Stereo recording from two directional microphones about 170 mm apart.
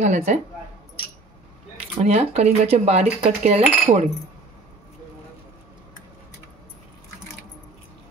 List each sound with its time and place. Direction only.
0.0 s speech: 45° right (ahead or behind)
2.0 s speech: 40° right (ahead or behind)